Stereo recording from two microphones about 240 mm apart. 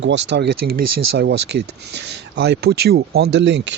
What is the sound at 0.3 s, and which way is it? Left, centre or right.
Speech, right.